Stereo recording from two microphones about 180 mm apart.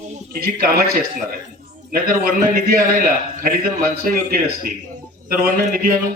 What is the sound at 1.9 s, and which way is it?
A man's voice, 55° right (ahead or behind).